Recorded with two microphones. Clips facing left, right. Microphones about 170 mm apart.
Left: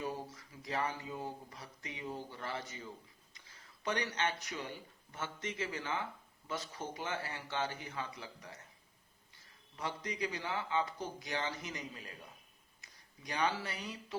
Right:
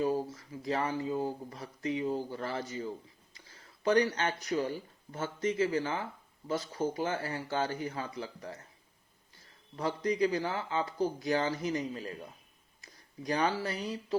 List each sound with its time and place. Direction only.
0.0 s a man's voice: 35° right (ahead or behind)
9.7 s a man's voice: 35° right (ahead or behind)